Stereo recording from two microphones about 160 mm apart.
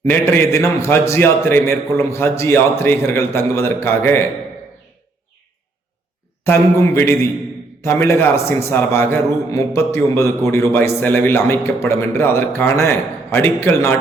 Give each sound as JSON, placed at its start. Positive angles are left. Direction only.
{"t": 0.0, "sound": "a man's voice", "side_deg": 15}
{"t": 6.4, "sound": "a man's voice", "side_deg": 15}